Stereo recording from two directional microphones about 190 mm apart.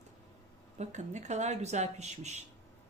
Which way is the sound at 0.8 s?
40° right (ahead or behind).